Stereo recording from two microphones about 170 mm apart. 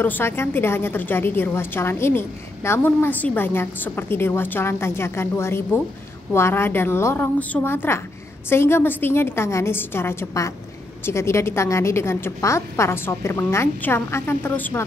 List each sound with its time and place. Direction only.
0.0 s a woman's voice: 15° left (ahead or behind)